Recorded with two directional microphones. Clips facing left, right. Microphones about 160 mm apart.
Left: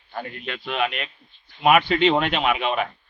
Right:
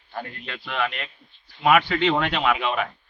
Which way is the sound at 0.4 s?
20° left (ahead or behind).